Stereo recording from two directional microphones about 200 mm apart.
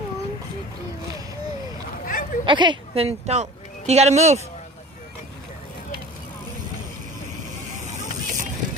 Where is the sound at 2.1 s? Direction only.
45° left (ahead or behind).